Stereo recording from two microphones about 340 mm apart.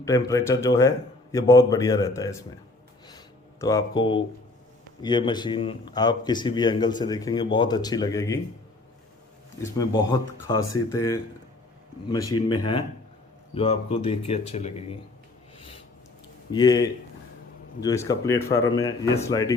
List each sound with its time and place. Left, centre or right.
0.0 s speech: centre
3.1 s a sound: centre
5.0 s speech: centre
9.7 s speech: centre
16.5 s speech: centre